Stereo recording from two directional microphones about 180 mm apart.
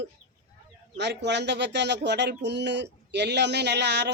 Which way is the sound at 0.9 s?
75° right (ahead or behind).